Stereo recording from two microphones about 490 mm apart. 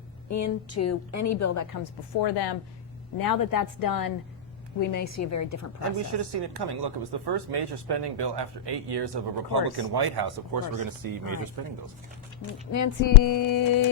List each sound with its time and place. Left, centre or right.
0.3 s a woman's voice: left
3.2 s a woman's voice: left
6.1 s speech: right
12.7 s a woman's voice: left